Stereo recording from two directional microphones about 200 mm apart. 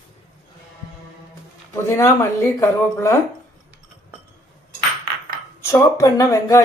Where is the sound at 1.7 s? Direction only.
15° left (ahead or behind).